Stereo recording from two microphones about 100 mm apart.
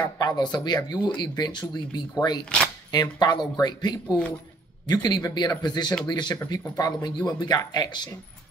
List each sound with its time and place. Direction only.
0.0 s speech: 45° left (ahead or behind)